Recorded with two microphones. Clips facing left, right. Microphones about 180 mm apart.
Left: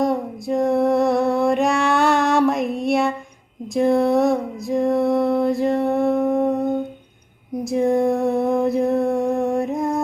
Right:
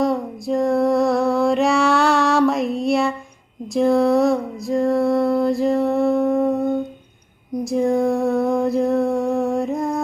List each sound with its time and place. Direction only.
0.4 s music: centre (ahead or behind)
4.8 s music: 20° left (ahead or behind)
5.0 s mantra: centre (ahead or behind)
7.6 s female singing: centre (ahead or behind)
8.4 s music: centre (ahead or behind)